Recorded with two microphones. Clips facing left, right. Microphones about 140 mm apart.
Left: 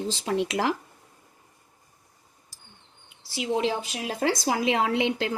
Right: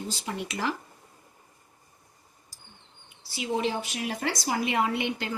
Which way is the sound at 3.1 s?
85° left.